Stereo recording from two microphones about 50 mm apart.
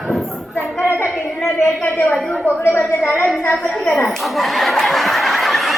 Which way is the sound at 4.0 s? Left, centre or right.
Centre.